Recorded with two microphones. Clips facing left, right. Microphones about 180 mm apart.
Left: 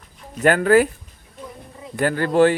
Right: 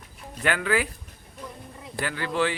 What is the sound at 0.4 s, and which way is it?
Speech, 45° left (ahead or behind).